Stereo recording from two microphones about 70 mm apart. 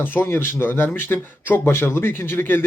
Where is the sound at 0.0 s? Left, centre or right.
Left.